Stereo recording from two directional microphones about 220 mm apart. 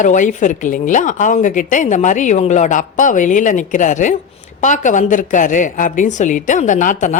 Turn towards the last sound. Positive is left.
turn(degrees=35)  # may be behind; listen again after turning